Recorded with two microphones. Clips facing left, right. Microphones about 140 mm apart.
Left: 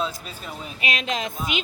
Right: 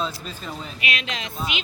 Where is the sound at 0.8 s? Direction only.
40° left (ahead or behind).